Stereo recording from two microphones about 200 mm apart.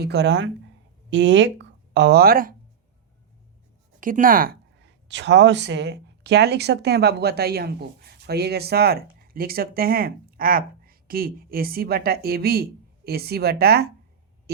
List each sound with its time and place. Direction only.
0.0 s speech: 60° right (ahead or behind)
4.0 s speech: 45° right (ahead or behind)